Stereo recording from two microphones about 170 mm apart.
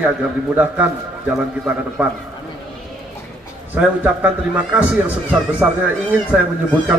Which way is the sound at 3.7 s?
5° right (ahead or behind).